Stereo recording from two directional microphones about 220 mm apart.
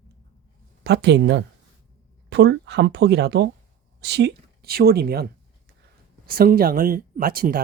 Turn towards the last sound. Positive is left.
turn(degrees=-40)  # may be behind; listen again after turning